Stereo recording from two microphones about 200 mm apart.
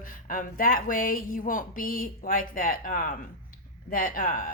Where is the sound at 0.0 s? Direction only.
45° left (ahead or behind).